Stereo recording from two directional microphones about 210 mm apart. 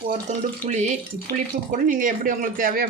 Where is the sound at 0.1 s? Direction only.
35° right (ahead or behind).